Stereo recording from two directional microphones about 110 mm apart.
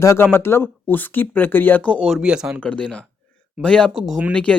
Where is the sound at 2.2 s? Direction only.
10° right (ahead or behind).